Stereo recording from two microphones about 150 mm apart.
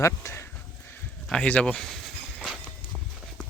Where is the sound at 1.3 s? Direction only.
5° left (ahead or behind).